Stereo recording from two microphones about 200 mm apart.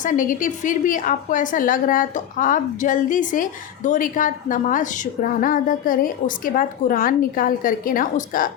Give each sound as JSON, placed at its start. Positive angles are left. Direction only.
{"t": 0.0, "sound": "a woman's voice", "side_deg": 40}